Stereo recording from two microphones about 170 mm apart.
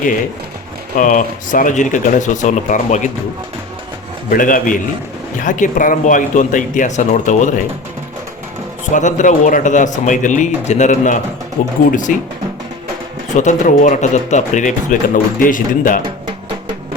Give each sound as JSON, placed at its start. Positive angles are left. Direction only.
{"t": 0.9, "sound": "speech", "side_deg": 50}
{"t": 4.3, "sound": "speech", "side_deg": 55}
{"t": 8.9, "sound": "speech", "side_deg": 45}
{"t": 13.3, "sound": "speech", "side_deg": 45}